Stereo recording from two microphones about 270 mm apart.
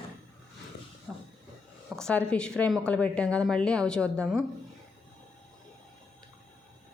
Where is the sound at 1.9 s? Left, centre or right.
Centre.